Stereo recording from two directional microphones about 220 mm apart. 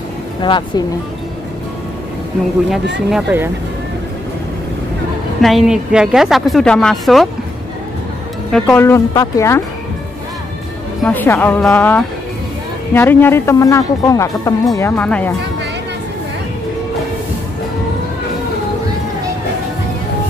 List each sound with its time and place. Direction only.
0.4 s speech: 20° left (ahead or behind)
3.1 s a woman's voice: 5° right (ahead or behind)
5.4 s a woman's voice: centre (ahead or behind)
8.5 s speech: 5° left (ahead or behind)
11.1 s speech: 10° left (ahead or behind)